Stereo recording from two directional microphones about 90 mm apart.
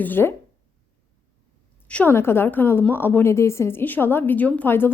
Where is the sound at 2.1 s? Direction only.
25° left (ahead or behind).